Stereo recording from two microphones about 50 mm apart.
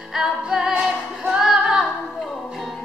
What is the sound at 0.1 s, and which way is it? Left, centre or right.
Music, centre.